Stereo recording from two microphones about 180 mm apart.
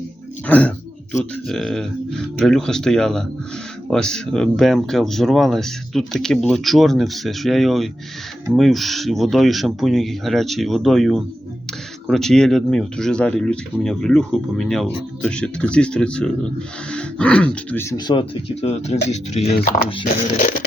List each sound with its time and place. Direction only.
0.4 s speech: 10° left (ahead or behind)
18.1 s speech: 30° left (ahead or behind)